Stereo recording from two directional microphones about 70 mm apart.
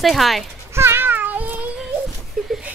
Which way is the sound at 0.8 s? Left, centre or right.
Right.